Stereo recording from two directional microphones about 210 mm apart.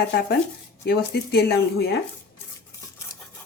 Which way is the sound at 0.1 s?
50° left (ahead or behind).